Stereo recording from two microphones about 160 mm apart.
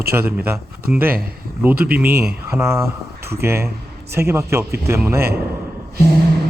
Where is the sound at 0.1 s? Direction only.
15° right (ahead or behind).